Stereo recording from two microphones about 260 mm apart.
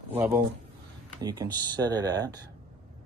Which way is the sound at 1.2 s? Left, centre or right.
Centre.